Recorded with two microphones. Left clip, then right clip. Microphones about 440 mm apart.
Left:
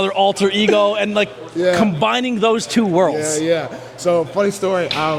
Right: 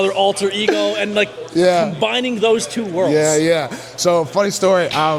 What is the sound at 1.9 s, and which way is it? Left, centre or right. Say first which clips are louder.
Speech: left 1 dB; left.